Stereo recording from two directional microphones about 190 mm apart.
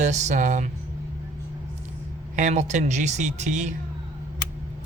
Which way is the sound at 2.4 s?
40° right (ahead or behind).